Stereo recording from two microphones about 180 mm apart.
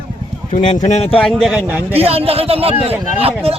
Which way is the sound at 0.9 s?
35° left (ahead or behind).